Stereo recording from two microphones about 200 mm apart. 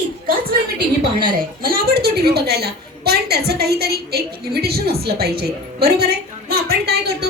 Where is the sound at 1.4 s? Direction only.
45° right (ahead or behind).